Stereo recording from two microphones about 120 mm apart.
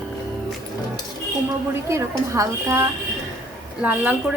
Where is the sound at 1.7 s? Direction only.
25° right (ahead or behind).